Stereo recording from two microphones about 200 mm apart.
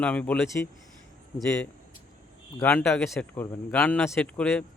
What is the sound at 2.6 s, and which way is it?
Speech, 10° left (ahead or behind).